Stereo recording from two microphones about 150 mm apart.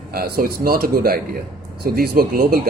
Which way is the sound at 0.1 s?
85° right.